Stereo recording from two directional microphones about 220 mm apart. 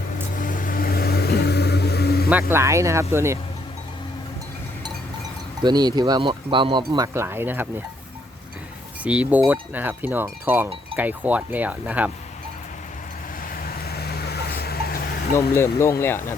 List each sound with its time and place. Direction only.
0.3 s a sound: 35° left (ahead or behind)
2.5 s speech: 10° right (ahead or behind)
5.6 s speech: 20° right (ahead or behind)
9.0 s speech: 5° right (ahead or behind)
13.5 s vehicle: 45° left (ahead or behind)
15.4 s speech: 10° left (ahead or behind)